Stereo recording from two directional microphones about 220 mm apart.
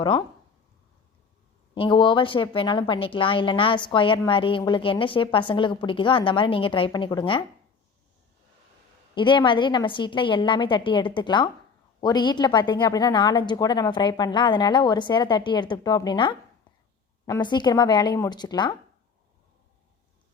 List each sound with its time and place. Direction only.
1.7 s a woman's voice: 25° left (ahead or behind)
9.1 s a woman's voice: 20° left (ahead or behind)